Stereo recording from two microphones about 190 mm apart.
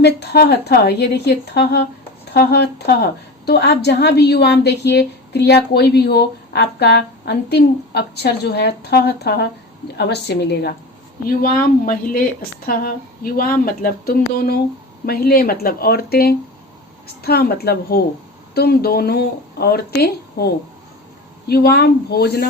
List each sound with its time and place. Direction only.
0.0 s a woman's voice: 60° left (ahead or behind)